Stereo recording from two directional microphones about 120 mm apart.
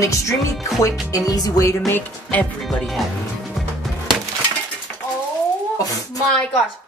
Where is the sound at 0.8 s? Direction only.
30° left (ahead or behind).